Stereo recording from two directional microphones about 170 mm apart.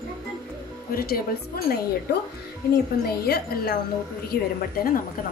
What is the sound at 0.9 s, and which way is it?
Speech, 60° left (ahead or behind).